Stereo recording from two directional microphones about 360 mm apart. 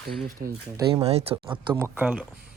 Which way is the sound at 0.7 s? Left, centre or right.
Centre.